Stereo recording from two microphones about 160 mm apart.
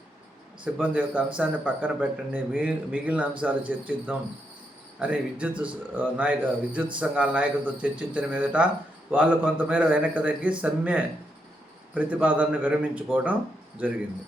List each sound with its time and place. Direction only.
0.6 s a man's voice: 10° right (ahead or behind)